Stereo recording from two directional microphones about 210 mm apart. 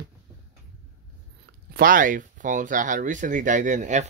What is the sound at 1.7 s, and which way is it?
Speech, 45° right (ahead or behind).